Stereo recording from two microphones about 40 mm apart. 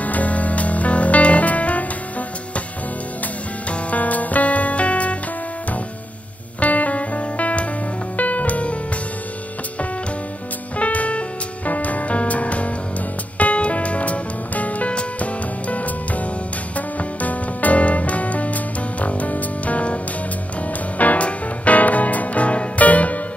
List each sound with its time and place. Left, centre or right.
0.0 s music: left
3.7 s music: left
6.6 s music: left
10.8 s music: left
21.0 s music: left